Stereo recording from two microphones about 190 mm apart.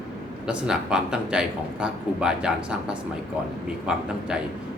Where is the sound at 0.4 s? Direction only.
5° right (ahead or behind).